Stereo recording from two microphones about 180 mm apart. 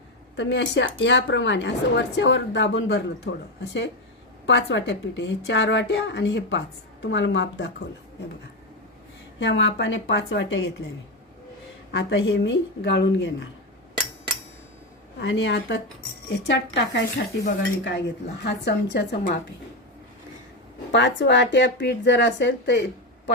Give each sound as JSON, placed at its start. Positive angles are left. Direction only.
{"t": 0.3, "sound": "a woman's voice", "side_deg": 80}
{"t": 3.6, "sound": "a woman's voice", "side_deg": 70}
{"t": 9.4, "sound": "a woman's voice", "side_deg": 80}
{"t": 11.9, "sound": "a woman's voice", "side_deg": 80}
{"t": 15.2, "sound": "a woman's voice", "side_deg": 90}
{"t": 16.5, "sound": "speech", "side_deg": 75}
{"t": 20.9, "sound": "speech", "side_deg": 80}